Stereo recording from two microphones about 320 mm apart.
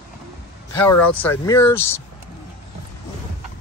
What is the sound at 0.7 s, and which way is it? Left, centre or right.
Speech, centre.